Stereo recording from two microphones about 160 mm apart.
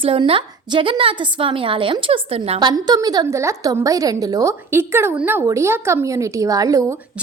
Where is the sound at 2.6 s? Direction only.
25° right (ahead or behind).